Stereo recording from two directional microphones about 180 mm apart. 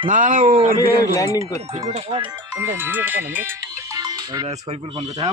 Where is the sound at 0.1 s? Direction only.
45° right (ahead or behind).